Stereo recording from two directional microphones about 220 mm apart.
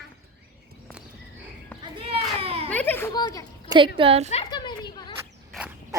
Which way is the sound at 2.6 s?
10° left (ahead or behind).